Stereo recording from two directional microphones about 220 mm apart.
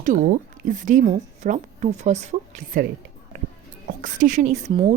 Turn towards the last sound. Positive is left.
turn(degrees=-25)  # may be behind; listen again after turning